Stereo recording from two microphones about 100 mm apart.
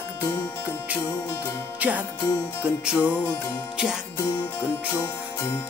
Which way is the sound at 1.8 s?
15° right (ahead or behind).